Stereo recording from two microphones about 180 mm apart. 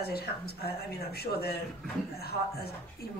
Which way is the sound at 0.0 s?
60° left (ahead or behind).